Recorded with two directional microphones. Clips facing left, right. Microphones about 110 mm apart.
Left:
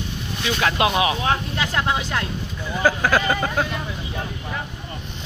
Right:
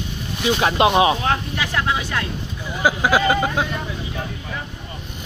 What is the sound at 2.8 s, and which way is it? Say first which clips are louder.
Speech: right 2 dB; 10° right (ahead or behind).